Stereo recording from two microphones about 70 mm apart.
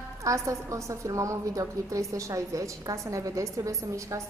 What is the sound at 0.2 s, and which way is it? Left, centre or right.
A woman's voice, right.